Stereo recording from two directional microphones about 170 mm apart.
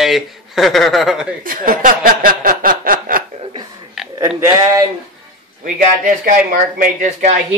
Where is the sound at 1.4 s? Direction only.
55° right (ahead or behind).